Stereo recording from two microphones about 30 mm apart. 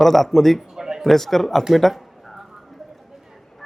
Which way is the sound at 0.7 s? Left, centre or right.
Centre.